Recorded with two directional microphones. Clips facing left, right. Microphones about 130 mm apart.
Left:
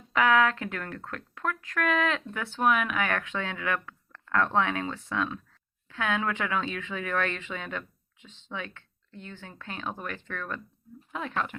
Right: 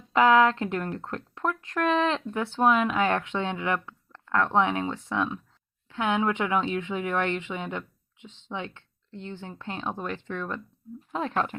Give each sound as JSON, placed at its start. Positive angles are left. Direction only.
{"t": 0.1, "sound": "speech", "side_deg": -25}
{"t": 11.1, "sound": "speech", "side_deg": -35}